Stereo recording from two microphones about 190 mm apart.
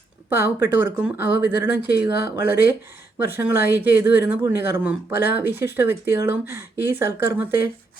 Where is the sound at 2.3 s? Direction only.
10° right (ahead or behind).